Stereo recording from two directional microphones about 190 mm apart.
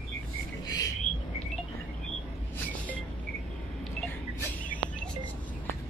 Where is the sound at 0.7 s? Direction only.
20° left (ahead or behind).